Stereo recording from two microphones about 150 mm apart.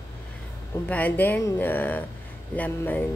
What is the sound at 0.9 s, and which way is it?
Speech, 10° left (ahead or behind).